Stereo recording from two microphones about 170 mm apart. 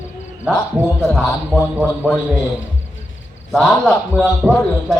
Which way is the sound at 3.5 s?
Centre (ahead or behind).